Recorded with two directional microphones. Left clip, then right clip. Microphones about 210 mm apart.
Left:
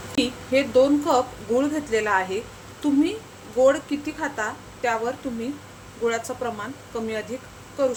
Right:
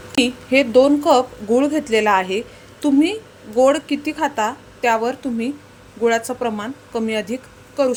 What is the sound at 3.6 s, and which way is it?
A woman's voice, 35° right (ahead or behind).